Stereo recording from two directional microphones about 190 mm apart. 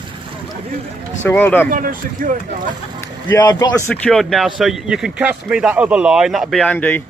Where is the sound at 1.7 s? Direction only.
45° right (ahead or behind).